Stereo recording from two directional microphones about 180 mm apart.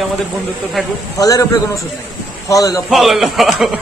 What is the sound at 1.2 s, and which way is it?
Speech, 20° left (ahead or behind).